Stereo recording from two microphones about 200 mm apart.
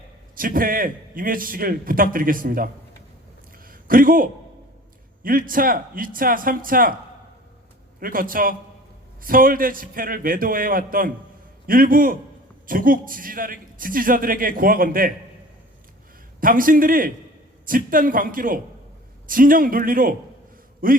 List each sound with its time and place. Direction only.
0.3 s a man's voice: 45° right (ahead or behind)
3.7 s a sound: 45° right (ahead or behind)
5.2 s a man's voice: 45° right (ahead or behind)
7.9 s a man's voice: 45° right (ahead or behind)
16.4 s a man's voice: 45° right (ahead or behind)